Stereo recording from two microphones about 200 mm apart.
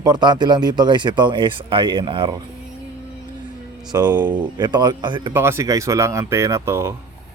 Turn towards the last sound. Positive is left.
turn(degrees=-10)  # may be behind; listen again after turning